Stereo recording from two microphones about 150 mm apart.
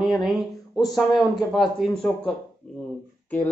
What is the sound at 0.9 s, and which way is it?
Speech, centre (ahead or behind).